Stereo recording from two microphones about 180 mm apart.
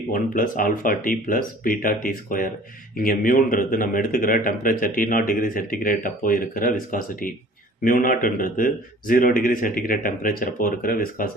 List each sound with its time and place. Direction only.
0.1 s a man's voice: 50° left (ahead or behind)